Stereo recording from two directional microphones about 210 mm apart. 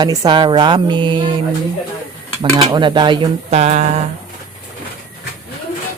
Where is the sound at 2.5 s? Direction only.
20° right (ahead or behind).